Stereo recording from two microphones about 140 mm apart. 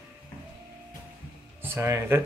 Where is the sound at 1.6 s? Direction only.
15° right (ahead or behind).